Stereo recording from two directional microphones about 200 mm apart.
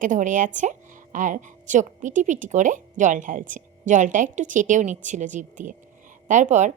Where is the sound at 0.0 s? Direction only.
40° right (ahead or behind).